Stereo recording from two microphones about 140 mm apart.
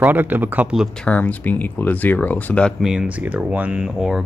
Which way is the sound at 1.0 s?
10° left (ahead or behind).